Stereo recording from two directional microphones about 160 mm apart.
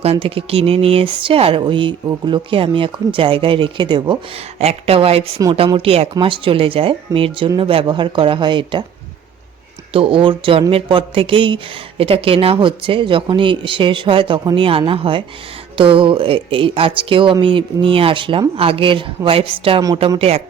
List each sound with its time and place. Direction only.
0.0 s speech: 40° right (ahead or behind)
9.9 s speech: 35° right (ahead or behind)